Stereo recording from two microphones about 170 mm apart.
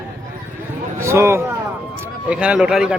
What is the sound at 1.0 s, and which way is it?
A man's voice, 15° right (ahead or behind).